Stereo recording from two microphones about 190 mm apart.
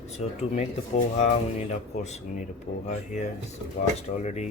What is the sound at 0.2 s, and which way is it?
Speech, 40° left (ahead or behind).